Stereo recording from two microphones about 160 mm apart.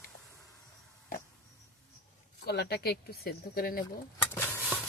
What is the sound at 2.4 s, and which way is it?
Speech, 90° left.